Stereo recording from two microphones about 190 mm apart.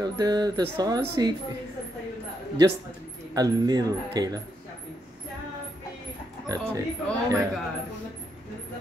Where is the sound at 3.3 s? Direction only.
20° right (ahead or behind).